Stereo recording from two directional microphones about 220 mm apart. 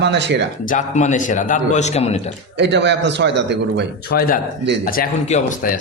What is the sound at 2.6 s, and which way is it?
A man's voice, 50° right (ahead or behind).